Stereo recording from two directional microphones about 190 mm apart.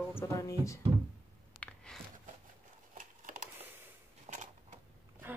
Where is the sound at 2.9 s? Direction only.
45° right (ahead or behind).